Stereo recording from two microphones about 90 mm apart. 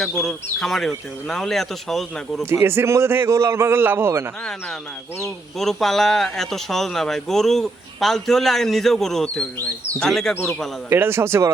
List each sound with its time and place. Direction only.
0.2 s speech: centre (ahead or behind)
2.4 s a man's voice: 30° right (ahead or behind)
5.5 s speech: 5° left (ahead or behind)
10.3 s a man's voice: 15° left (ahead or behind)
10.8 s a man's voice: 25° right (ahead or behind)